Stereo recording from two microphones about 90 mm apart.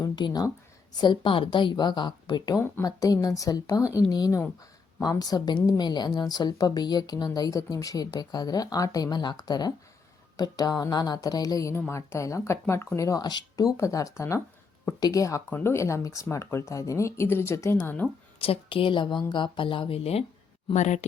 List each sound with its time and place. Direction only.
0.0 s speech: 50° left (ahead or behind)
1.0 s a woman's voice: 60° left (ahead or behind)
2.8 s speech: 40° left (ahead or behind)
11.9 s speech: 30° left (ahead or behind)
13.0 s speech: 40° left (ahead or behind)
15.4 s speech: 25° left (ahead or behind)
18.3 s speech: 90° left